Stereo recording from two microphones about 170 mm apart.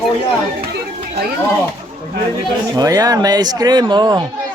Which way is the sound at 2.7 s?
20° right (ahead or behind).